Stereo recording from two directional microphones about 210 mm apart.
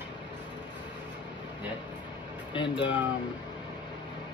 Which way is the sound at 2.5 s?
20° left (ahead or behind).